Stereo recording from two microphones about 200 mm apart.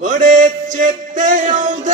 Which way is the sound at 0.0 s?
40° right (ahead or behind).